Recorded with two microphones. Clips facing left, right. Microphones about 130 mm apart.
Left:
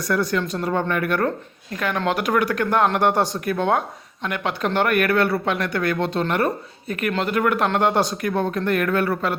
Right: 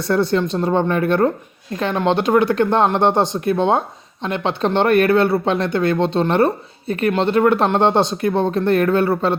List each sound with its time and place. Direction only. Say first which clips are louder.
0.0 s speech: right 5 dB; 30° right (ahead or behind)